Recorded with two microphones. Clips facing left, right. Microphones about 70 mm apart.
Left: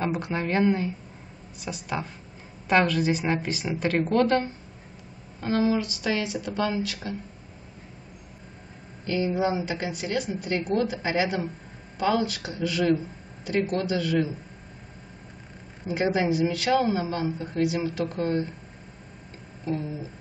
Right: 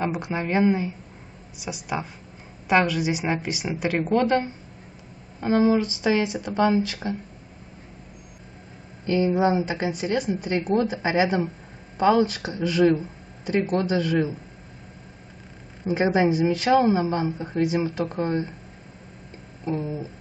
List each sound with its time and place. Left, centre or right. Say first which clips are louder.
0.0 s a woman's voice: right 1 dB; centre
5.4 s a woman's voice: right 4 dB; centre
9.0 s a woman's voice: right 4 dB; right
15.9 s a woman's voice: right 4 dB; right
19.6 s a woman's voice: right 2 dB; right